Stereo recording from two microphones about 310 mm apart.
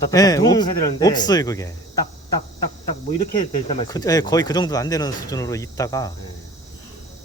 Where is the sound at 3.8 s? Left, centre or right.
Centre.